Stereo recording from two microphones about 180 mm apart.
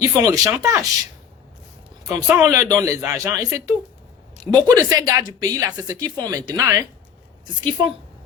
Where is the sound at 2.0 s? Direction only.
15° right (ahead or behind).